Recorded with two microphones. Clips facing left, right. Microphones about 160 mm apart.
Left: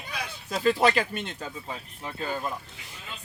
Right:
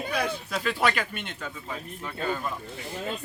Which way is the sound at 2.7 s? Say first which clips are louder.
Right 11 dB; 45° right (ahead or behind).